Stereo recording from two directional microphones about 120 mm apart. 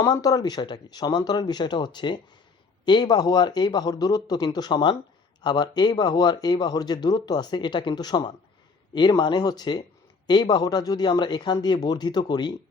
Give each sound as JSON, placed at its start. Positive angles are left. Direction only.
{"t": 0.0, "sound": "a man's voice", "side_deg": 30}